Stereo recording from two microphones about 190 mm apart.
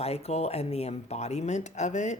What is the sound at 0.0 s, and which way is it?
Speech, 35° left (ahead or behind).